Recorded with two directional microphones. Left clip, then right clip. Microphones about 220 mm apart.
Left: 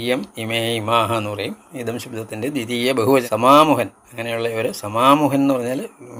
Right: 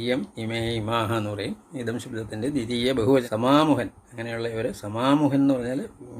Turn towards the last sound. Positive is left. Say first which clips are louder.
# left 5 dB
turn(degrees=-5)  # may be behind; listen again after turning